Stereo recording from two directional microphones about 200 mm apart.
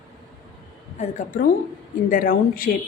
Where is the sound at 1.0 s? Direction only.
40° left (ahead or behind).